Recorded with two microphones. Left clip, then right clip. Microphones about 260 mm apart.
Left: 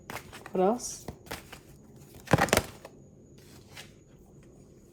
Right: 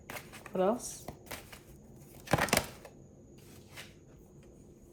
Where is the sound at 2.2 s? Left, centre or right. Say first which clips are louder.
Left 5 dB; left.